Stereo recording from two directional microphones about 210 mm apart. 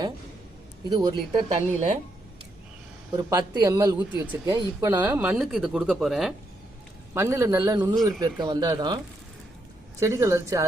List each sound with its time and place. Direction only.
0.9 s speech: 20° right (ahead or behind)
1.5 s a woman's voice: 35° right (ahead or behind)
3.2 s speech: 15° right (ahead or behind)
5.0 s speech: 10° right (ahead or behind)
7.1 s speech: 15° right (ahead or behind)
10.0 s speech: 15° right (ahead or behind)